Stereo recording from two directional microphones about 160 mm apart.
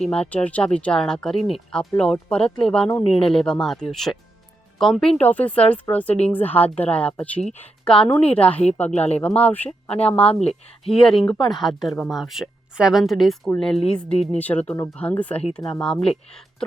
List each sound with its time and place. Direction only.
0.0 s speech: 5° left (ahead or behind)
10.4 s speech: 40° left (ahead or behind)
10.9 s speech: 5° left (ahead or behind)